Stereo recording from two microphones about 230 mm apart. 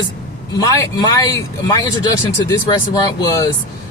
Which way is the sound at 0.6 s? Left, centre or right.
Centre.